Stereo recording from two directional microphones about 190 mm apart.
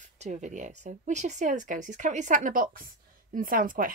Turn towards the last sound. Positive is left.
turn(degrees=-45)  # may be behind; listen again after turning